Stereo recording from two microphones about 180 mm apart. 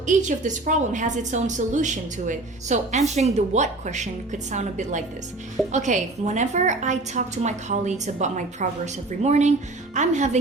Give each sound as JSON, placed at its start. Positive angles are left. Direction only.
{"t": 0.0, "sound": "a woman's voice", "side_deg": -45}